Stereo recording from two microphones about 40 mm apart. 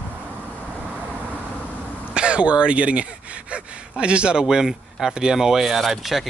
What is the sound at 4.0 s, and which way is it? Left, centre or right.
A man's voice, right.